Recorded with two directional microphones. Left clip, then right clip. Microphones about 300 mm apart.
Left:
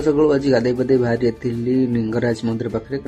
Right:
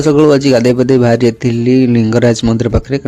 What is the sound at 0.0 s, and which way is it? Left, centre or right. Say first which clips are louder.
Speech: right 8 dB; right.